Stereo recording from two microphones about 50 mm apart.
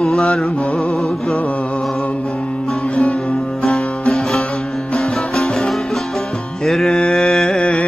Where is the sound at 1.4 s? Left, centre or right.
Left.